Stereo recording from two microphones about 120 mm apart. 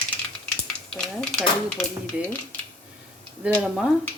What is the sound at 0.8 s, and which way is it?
Speech, 5° left (ahead or behind).